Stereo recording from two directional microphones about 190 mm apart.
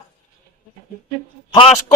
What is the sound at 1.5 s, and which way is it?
Speech, 30° left (ahead or behind).